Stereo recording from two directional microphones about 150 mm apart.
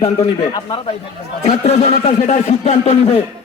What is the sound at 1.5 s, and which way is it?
A man's voice, 45° left (ahead or behind).